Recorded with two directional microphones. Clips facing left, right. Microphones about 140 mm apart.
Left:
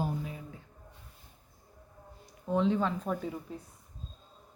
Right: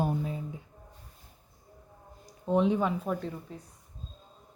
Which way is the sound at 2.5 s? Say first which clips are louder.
Right 2 dB; 15° right (ahead or behind).